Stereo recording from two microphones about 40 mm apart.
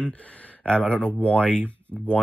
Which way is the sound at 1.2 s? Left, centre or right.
Left.